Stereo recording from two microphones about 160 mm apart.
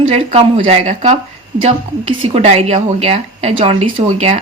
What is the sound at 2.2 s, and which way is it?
A woman's voice, 40° right (ahead or behind).